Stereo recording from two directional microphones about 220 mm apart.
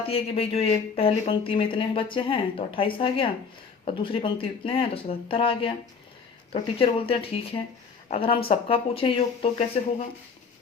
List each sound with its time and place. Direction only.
0.0 s speech: 25° left (ahead or behind)